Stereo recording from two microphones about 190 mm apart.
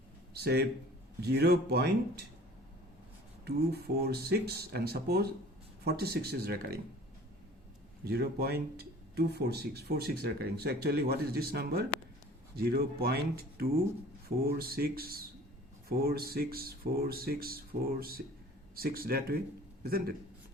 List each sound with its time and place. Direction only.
0.3 s speech: 55° right (ahead or behind)
3.4 s speech: 55° right (ahead or behind)
8.0 s speech: 55° right (ahead or behind)